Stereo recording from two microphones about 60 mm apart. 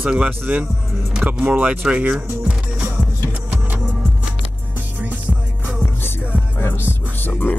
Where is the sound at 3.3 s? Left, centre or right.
Right.